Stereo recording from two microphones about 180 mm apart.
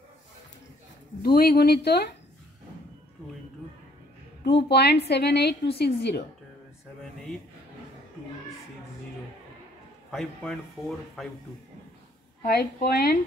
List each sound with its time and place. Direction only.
1.2 s speech: 55° left (ahead or behind)
4.5 s a woman's voice: 70° left (ahead or behind)
10.1 s a man's voice: centre (ahead or behind)
12.4 s speech: 60° left (ahead or behind)